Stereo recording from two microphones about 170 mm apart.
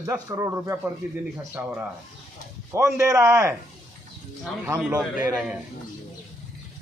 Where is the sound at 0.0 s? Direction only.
20° right (ahead or behind).